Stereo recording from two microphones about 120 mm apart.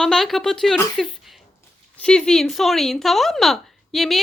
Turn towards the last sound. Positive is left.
turn(degrees=0)  # may be behind; listen again after turning